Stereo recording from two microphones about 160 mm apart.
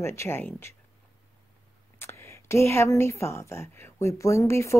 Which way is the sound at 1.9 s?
15° left (ahead or behind).